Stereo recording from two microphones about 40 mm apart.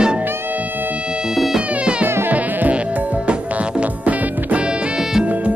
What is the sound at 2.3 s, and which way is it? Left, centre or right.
Insect, right.